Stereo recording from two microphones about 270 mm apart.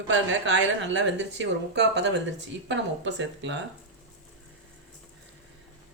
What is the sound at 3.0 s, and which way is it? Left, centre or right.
Speech, right.